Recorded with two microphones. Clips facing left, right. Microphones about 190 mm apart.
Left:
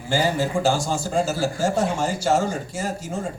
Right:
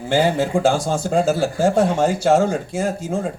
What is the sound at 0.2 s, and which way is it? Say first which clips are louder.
Speech: right 5 dB; 55° right (ahead or behind).